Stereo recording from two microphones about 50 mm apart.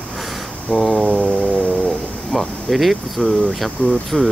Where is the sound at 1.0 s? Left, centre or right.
Left.